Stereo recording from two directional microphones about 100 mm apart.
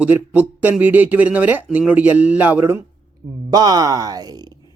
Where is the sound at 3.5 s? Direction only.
40° right (ahead or behind).